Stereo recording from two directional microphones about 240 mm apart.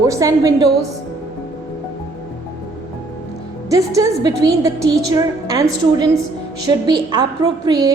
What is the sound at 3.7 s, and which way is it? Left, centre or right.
A woman's voice, centre.